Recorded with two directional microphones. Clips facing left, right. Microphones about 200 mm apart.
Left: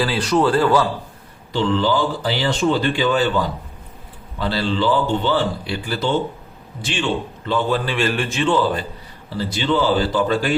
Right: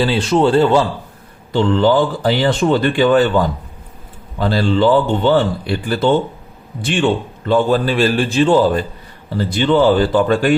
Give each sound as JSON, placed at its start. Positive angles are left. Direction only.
{"t": 0.0, "sound": "speech", "side_deg": -25}
{"t": 1.5, "sound": "a man's voice", "side_deg": -55}
{"t": 9.4, "sound": "speech", "side_deg": -55}